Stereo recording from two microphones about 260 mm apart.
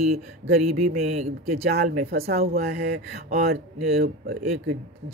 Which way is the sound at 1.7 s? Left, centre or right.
Right.